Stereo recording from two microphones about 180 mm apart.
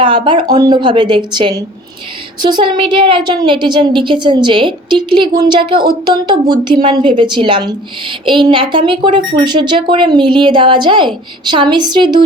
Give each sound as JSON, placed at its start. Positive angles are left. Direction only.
{"t": 0.0, "sound": "a woman's voice", "side_deg": -25}